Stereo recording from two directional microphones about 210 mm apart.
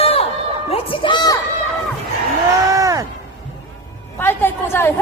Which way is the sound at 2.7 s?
15° right (ahead or behind).